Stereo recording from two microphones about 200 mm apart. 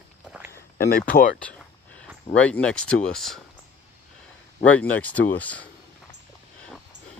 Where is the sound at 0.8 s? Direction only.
45° left (ahead or behind).